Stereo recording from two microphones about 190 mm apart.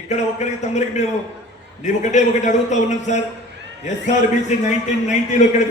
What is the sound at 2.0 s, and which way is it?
A man's voice, 40° left (ahead or behind).